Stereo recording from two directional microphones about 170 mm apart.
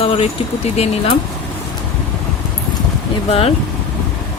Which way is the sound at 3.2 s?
35° left (ahead or behind).